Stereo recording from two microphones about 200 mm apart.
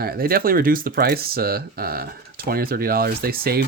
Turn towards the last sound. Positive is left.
turn(degrees=-50)  # may be behind; listen again after turning